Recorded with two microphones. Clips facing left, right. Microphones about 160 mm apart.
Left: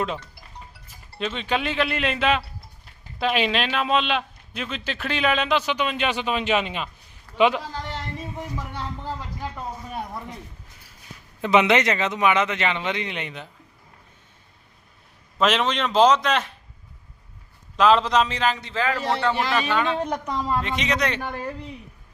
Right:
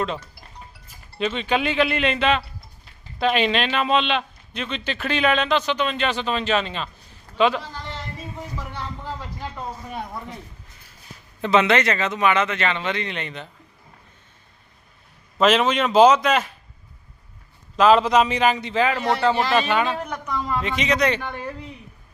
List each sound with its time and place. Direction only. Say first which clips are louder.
1.2 s a man's voice: right 3 dB; centre (ahead or behind); by 7.6 s 15° left (ahead or behind)
11.5 s speech: even; 15° left (ahead or behind)
15.4 s a man's voice: right 4 dB; centre (ahead or behind)
17.7 s a man's voice: right 2 dB; 5° right (ahead or behind)
20.1 s speech: left 1 dB; 35° left (ahead or behind)
20.6 s a man's voice: right 3 dB; centre (ahead or behind)
21.2 s speech: left 1 dB; 40° left (ahead or behind)